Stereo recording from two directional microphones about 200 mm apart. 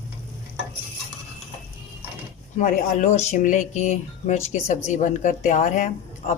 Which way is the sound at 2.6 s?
40° left (ahead or behind).